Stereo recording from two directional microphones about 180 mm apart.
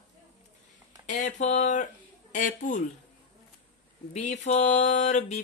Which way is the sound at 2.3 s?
45° left (ahead or behind).